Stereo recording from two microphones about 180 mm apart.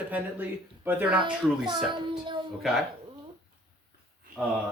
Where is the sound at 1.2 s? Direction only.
25° right (ahead or behind).